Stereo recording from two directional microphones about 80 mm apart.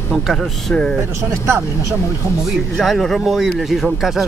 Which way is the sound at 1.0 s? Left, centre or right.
Right.